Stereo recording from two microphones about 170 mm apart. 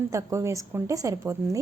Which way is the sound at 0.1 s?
20° right (ahead or behind).